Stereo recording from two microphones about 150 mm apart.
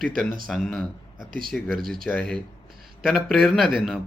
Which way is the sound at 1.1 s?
70° right (ahead or behind).